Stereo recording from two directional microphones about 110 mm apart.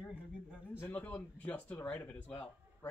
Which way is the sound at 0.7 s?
15° left (ahead or behind).